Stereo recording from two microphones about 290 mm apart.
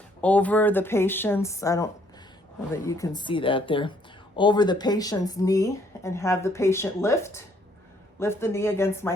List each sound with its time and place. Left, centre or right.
0.2 s speech: centre